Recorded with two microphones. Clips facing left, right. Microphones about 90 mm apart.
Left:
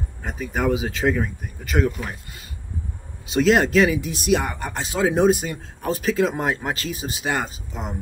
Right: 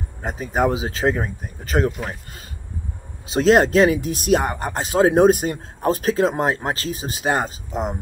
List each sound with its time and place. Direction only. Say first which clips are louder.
0.2 s speech: right 4 dB; 30° right (ahead or behind)
3.3 s speech: right 2 dB; 35° right (ahead or behind)